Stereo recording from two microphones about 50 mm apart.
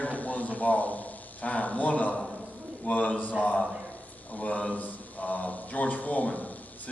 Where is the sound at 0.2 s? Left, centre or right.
Left.